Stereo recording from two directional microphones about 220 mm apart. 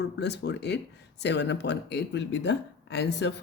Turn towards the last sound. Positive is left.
turn(degrees=50)  # may be behind; listen again after turning